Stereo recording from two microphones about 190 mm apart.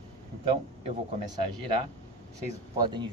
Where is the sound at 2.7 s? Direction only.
20° right (ahead or behind).